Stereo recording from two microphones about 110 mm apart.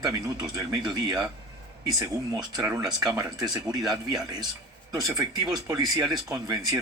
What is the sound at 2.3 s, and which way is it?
Speech, 35° right (ahead or behind).